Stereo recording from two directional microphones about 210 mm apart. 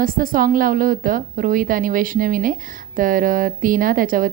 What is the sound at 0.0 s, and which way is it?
A woman's voice, 40° right (ahead or behind).